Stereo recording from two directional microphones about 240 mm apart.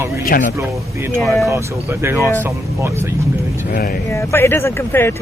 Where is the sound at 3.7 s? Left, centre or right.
Left.